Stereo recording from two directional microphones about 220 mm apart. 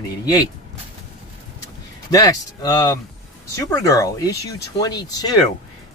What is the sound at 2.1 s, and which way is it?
Speech, 15° left (ahead or behind).